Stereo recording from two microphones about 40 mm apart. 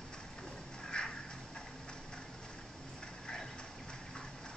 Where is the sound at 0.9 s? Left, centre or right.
Left.